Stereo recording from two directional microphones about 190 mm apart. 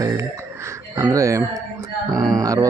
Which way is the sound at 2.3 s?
20° right (ahead or behind).